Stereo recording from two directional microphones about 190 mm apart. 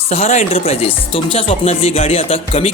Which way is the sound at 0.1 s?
35° left (ahead or behind).